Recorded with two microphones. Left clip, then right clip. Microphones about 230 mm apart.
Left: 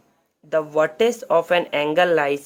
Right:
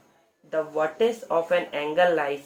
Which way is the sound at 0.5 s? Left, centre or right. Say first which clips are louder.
Left 6 dB; left.